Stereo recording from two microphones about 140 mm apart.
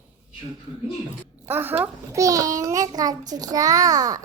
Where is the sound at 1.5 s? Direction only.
15° right (ahead or behind).